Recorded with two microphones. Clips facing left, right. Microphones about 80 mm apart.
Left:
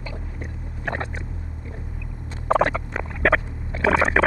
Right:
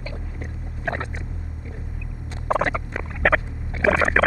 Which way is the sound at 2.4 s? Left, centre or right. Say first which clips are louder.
Left 2 dB; centre.